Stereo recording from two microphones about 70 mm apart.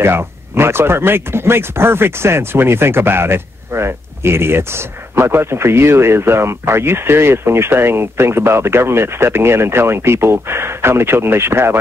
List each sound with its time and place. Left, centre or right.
0.0 s speech: right